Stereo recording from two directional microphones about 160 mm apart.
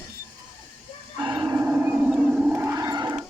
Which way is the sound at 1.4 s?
15° right (ahead or behind).